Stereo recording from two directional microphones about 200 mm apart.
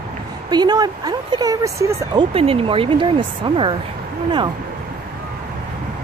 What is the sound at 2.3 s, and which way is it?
Speech, 30° right (ahead or behind).